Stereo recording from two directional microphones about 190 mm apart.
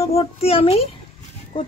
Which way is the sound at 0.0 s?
30° left (ahead or behind).